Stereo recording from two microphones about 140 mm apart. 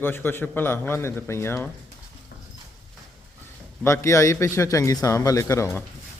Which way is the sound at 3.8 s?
20° left (ahead or behind).